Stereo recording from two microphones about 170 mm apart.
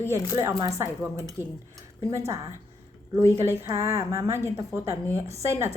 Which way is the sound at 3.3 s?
15° right (ahead or behind).